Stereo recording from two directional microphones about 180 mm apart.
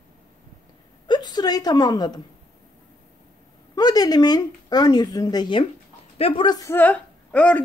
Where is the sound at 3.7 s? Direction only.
20° left (ahead or behind).